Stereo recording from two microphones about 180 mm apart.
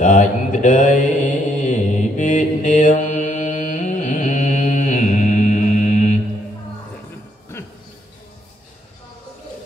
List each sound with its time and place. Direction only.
0.0 s mantra: 45° left (ahead or behind)